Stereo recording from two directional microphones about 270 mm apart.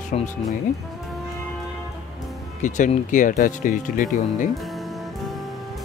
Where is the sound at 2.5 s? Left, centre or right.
Left.